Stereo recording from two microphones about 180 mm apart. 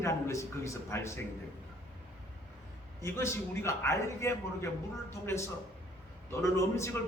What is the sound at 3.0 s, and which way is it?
A man's voice, 15° left (ahead or behind).